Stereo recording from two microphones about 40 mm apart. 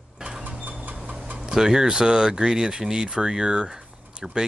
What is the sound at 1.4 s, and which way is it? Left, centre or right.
Speech, centre.